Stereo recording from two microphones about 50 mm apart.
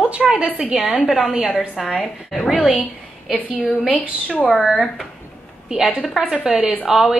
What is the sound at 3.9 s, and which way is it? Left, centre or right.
Speech, left.